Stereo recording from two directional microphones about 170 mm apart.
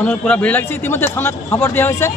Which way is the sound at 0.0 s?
5° left (ahead or behind).